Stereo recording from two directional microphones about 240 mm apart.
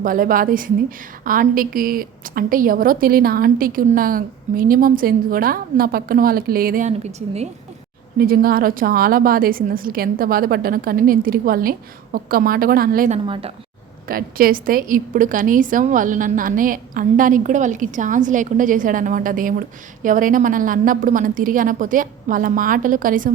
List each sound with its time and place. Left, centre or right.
0.0 s a woman's voice: right
8.2 s a woman's voice: right
13.2 s a woman's voice: right
14.1 s a woman's voice: right